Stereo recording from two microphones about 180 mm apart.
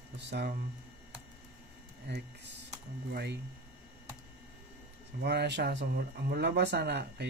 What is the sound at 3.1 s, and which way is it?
Speech, 65° right (ahead or behind).